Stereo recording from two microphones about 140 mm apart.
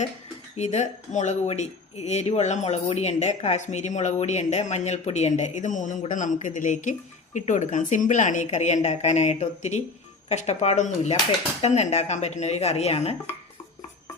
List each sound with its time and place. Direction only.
0.5 s speech: 55° left (ahead or behind)